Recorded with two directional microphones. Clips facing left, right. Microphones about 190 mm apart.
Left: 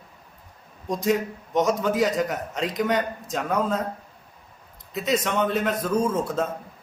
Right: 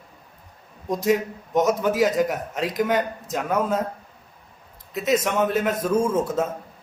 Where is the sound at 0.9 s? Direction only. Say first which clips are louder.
Right 2 dB; 5° right (ahead or behind).